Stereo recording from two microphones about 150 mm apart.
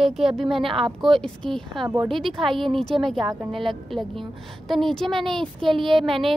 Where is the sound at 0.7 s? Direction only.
35° right (ahead or behind).